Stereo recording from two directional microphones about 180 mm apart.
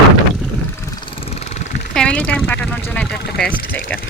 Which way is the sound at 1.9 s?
5° left (ahead or behind).